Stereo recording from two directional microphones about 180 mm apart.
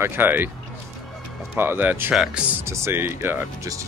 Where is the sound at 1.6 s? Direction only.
10° right (ahead or behind).